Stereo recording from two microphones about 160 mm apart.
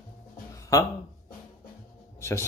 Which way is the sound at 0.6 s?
20° left (ahead or behind).